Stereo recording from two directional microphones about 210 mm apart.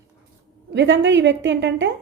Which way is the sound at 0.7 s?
60° right (ahead or behind).